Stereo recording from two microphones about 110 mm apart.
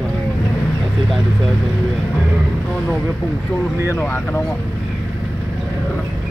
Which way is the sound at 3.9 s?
20° left (ahead or behind).